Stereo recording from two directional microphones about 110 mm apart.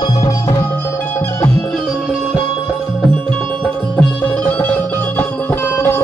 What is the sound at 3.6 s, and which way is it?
Music, 15° left (ahead or behind).